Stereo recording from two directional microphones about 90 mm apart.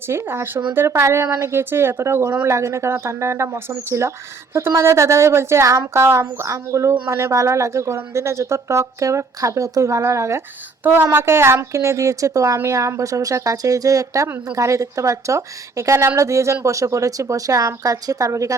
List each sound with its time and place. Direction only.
0.1 s speech: 30° right (ahead or behind)